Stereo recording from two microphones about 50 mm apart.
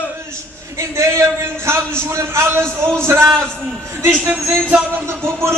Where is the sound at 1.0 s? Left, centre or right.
Right.